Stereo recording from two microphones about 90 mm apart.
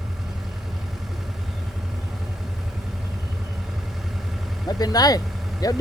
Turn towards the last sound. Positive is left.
turn(degrees=45)  # may be behind; listen again after turning